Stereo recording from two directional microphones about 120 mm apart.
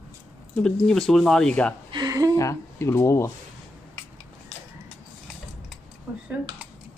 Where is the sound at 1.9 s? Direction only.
35° right (ahead or behind).